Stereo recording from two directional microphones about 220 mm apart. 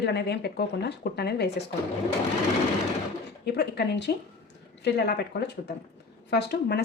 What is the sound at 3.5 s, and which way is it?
A woman's voice, 50° left (ahead or behind).